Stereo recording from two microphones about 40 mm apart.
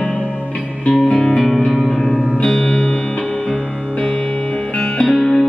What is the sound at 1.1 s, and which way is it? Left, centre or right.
Music, centre.